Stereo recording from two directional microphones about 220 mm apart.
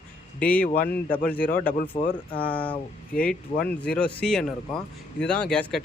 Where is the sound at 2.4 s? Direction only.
5° left (ahead or behind).